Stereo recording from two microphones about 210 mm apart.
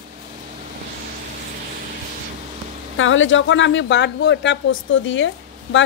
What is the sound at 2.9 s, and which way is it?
Speech, 70° left (ahead or behind).